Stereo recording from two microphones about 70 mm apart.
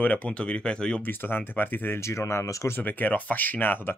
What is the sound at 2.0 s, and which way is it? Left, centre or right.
Speech, left.